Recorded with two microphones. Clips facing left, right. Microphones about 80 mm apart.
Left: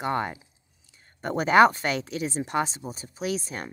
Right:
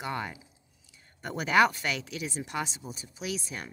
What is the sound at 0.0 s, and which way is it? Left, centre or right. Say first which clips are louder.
Speech: left 7 dB; left.